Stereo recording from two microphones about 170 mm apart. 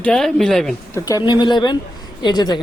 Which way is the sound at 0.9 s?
20° left (ahead or behind).